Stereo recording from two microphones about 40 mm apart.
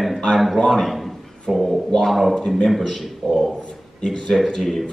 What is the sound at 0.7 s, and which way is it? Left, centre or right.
Speech, centre.